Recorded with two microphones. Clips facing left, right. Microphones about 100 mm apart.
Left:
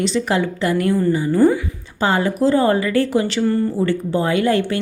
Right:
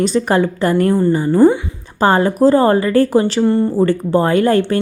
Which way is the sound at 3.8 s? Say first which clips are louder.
Right 5 dB; 45° right (ahead or behind).